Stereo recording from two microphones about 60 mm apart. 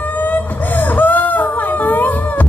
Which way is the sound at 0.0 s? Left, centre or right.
Left.